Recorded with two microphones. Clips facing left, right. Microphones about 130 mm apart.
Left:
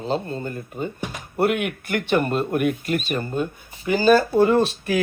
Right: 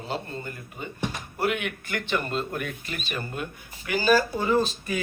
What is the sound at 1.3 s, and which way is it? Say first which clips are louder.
Speech: left 8 dB; 55° left (ahead or behind).